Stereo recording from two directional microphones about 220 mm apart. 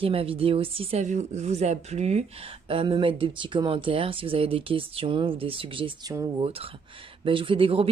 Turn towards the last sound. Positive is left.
turn(degrees=-25)  # may be behind; listen again after turning